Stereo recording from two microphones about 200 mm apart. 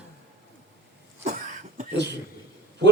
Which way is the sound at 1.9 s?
60° right (ahead or behind).